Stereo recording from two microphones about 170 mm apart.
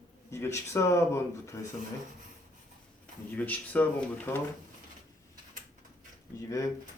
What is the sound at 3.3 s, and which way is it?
Speech, 10° left (ahead or behind).